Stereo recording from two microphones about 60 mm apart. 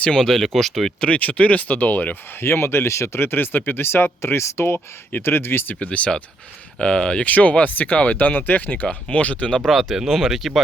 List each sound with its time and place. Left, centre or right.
0.0 s speech: centre
1.0 s speech: left
2.4 s speech: left
6.7 s speech: centre
9.6 s speech: centre